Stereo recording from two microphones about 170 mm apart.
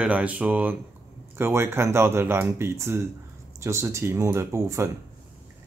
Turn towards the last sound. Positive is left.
turn(degrees=-15)  # may be behind; listen again after turning